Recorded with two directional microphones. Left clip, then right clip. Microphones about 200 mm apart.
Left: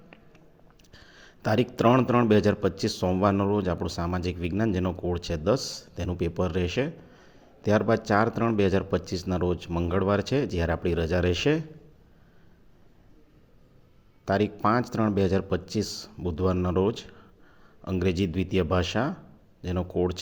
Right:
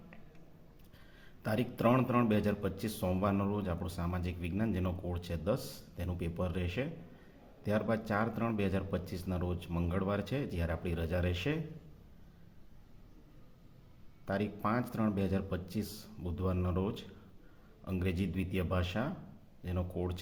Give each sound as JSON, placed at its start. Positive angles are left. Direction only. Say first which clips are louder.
{"t": 0.9, "sound": "a man's voice", "louder": "left 10 dB", "side_deg": 35}
{"t": 14.3, "sound": "a man's voice", "louder": "left 11 dB", "side_deg": 35}